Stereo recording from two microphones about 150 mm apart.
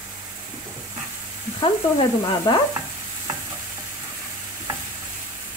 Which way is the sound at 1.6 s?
35° left (ahead or behind).